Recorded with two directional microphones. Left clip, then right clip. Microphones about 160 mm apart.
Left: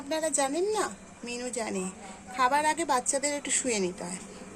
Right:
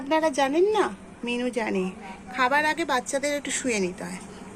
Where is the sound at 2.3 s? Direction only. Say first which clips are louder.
Right 3 dB; 10° left (ahead or behind).